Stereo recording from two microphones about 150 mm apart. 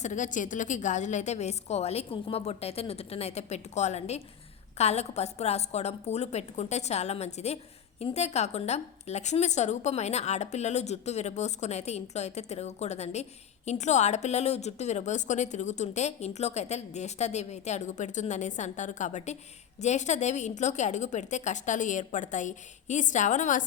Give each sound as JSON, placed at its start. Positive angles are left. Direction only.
{"t": 0.0, "sound": "a woman's voice", "side_deg": 55}